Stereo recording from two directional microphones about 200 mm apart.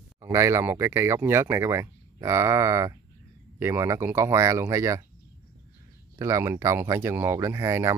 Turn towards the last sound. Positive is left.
turn(degrees=-15)  # may be behind; listen again after turning